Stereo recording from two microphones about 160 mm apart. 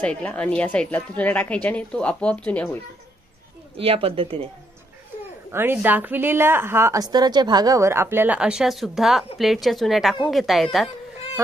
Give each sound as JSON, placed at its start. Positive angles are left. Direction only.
{"t": 0.0, "sound": "a woman's voice", "side_deg": 10}
{"t": 3.7, "sound": "speech", "side_deg": -35}
{"t": 5.5, "sound": "a woman's voice", "side_deg": -15}